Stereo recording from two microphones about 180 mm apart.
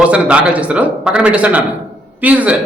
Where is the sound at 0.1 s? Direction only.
5° right (ahead or behind).